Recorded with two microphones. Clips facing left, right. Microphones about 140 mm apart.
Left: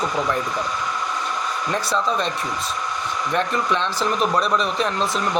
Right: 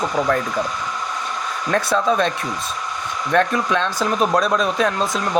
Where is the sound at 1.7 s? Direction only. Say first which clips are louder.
Right 5 dB; 55° right (ahead or behind).